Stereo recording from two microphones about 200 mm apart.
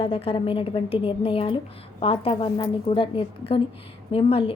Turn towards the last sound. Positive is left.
turn(degrees=30)  # may be behind; listen again after turning